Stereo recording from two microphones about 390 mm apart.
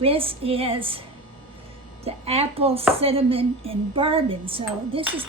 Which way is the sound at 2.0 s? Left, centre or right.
Centre.